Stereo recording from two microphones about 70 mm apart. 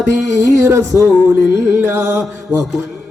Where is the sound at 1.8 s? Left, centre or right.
Right.